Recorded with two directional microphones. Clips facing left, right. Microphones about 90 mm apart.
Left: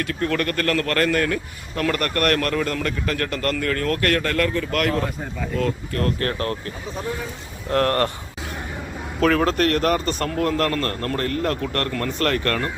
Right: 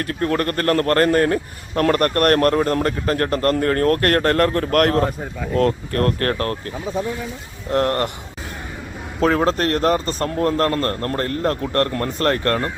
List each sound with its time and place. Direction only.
0.0 s a man's voice: 35° right (ahead or behind)
7.7 s speech: 20° right (ahead or behind)
9.2 s a man's voice: 30° right (ahead or behind)